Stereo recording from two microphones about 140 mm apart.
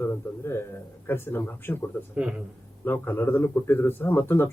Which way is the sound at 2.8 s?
15° left (ahead or behind).